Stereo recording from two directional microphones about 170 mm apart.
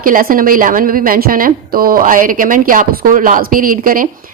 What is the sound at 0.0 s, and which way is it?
A woman's voice, 55° right (ahead or behind).